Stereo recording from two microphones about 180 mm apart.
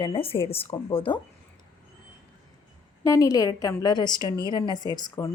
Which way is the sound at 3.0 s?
20° left (ahead or behind).